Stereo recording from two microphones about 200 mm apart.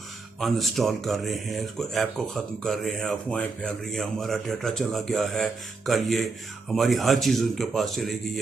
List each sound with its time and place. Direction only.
0.3 s speech: centre (ahead or behind)